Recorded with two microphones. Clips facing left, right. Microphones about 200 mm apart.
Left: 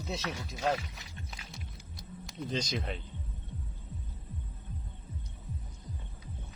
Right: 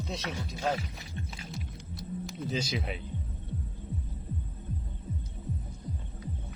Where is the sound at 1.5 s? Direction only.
Centre (ahead or behind).